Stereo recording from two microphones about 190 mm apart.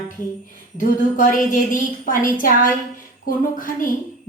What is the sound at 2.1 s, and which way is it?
Music, 45° left (ahead or behind).